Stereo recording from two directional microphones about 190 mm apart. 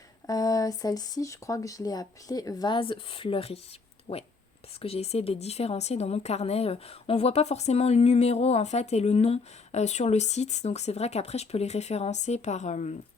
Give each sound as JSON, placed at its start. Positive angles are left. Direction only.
{"t": 0.3, "sound": "speech", "side_deg": 20}